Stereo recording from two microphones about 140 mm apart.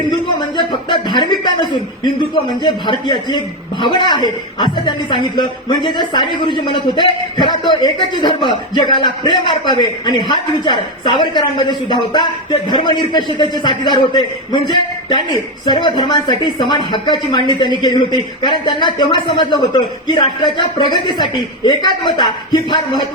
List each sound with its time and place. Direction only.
0.3 s a man's voice: 30° left (ahead or behind)